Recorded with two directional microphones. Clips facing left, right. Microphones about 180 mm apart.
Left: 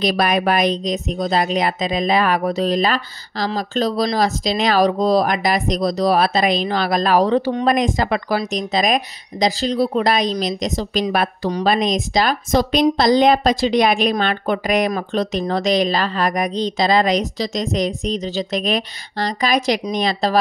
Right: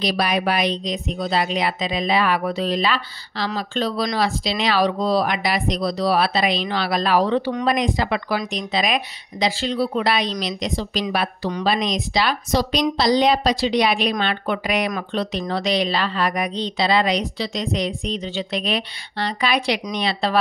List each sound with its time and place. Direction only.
0.0 s speech: 50° left (ahead or behind)